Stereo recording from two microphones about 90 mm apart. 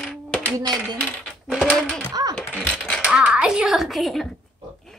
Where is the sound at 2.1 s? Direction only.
45° right (ahead or behind).